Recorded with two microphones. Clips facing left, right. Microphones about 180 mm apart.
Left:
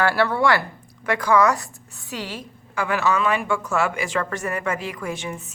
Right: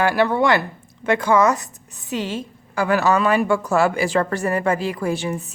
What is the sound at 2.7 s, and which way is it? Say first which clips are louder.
A woman's voice: right 4 dB; 40° right (ahead or behind).